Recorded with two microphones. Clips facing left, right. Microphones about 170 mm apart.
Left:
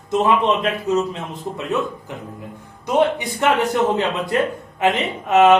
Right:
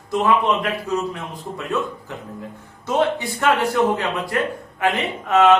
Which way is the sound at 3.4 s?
20° left (ahead or behind).